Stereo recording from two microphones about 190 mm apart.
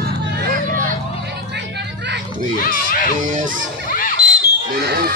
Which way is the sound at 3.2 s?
40° right (ahead or behind).